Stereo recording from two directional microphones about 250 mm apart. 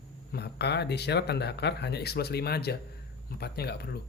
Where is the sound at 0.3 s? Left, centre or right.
Left.